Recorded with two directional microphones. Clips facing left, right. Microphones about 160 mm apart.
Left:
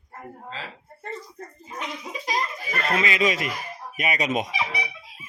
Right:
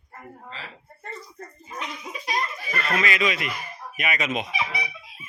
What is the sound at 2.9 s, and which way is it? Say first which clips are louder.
Speech: left 1 dB; 25° left (ahead or behind).